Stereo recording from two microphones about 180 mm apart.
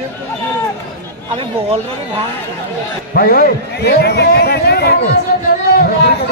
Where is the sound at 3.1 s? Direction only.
55° left (ahead or behind).